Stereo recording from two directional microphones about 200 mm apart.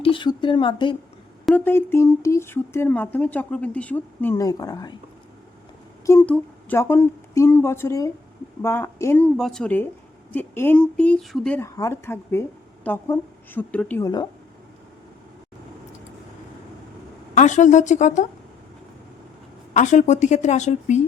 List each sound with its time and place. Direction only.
0.0 s speech: 25° left (ahead or behind)
1.5 s speech: 10° left (ahead or behind)
6.1 s speech: 10° left (ahead or behind)
17.3 s a woman's voice: 40° left (ahead or behind)
19.7 s a woman's voice: 40° left (ahead or behind)